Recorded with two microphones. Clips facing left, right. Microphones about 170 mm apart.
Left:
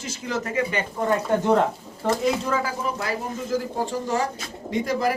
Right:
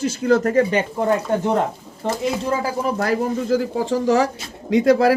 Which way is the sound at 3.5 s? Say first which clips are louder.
Right 4 dB; 75° right (ahead or behind).